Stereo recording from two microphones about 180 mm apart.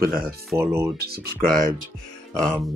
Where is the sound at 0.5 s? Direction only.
15° right (ahead or behind).